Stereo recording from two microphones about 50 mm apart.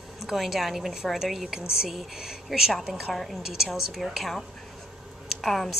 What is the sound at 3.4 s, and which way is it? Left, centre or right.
A woman's voice, centre.